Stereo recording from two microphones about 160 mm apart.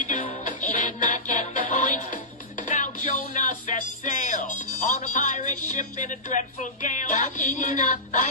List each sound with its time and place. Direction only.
0.0 s music: 50° left (ahead or behind)